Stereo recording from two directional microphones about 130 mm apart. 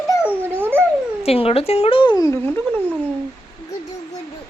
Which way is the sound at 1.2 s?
50° left (ahead or behind).